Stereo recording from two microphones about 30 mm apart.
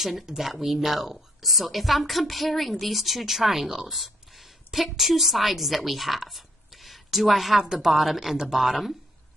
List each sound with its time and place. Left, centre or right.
0.4 s a woman's voice: centre
3.9 s a sound: centre
4.7 s a woman's voice: centre
7.6 s speech: centre
7.9 s a woman's voice: centre